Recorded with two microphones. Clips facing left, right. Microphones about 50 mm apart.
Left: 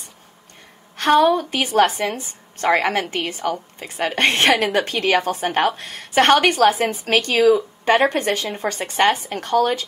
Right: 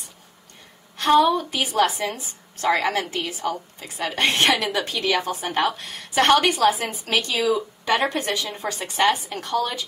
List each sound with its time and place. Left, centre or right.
0.9 s a woman's voice: left